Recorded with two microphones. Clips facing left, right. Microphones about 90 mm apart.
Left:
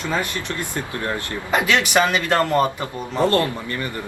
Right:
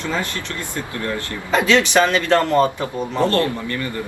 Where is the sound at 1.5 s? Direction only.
15° left (ahead or behind).